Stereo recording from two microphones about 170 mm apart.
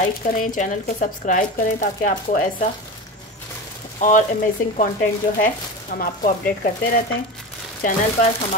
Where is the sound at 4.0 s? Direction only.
50° left (ahead or behind).